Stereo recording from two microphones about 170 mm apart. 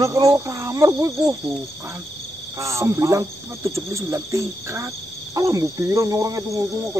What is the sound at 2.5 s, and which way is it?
Speech, 15° right (ahead or behind).